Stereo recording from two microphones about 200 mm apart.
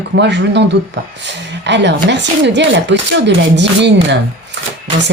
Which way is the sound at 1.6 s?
60° right (ahead or behind).